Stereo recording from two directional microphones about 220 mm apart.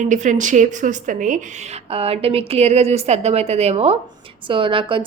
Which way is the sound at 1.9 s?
25° right (ahead or behind).